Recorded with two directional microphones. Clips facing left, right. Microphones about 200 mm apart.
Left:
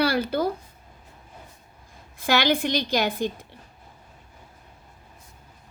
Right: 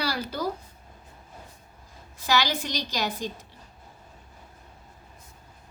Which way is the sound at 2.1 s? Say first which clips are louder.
Left 4 dB; 55° left (ahead or behind).